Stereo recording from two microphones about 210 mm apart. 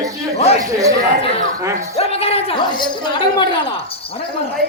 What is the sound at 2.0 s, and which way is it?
Speech, 30° left (ahead or behind).